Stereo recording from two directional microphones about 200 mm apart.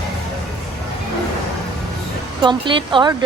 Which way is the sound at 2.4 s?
25° right (ahead or behind).